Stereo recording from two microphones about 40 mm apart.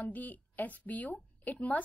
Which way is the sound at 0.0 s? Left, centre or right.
Left.